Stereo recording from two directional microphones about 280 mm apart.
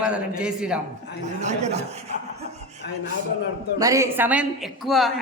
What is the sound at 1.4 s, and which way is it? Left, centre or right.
Speech, right.